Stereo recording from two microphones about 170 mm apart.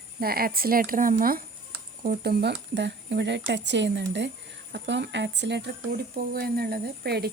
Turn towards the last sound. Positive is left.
turn(degrees=-70)  # may be behind; listen again after turning